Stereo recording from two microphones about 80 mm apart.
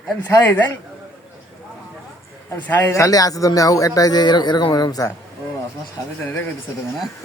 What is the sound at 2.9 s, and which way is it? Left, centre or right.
Speech, left.